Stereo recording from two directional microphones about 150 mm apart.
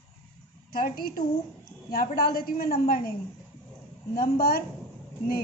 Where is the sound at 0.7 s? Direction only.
80° left.